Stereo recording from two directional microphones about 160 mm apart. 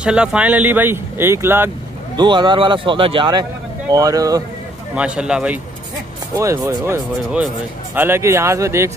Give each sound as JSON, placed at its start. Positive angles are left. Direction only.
{"t": 0.0, "sound": "speech", "side_deg": -5}
{"t": 2.1, "sound": "a man's voice", "side_deg": -30}
{"t": 4.9, "sound": "speech", "side_deg": -5}
{"t": 6.3, "sound": "speech", "side_deg": -20}
{"t": 7.3, "sound": "speech", "side_deg": -10}